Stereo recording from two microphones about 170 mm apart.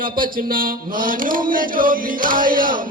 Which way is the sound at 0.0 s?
55° right (ahead or behind).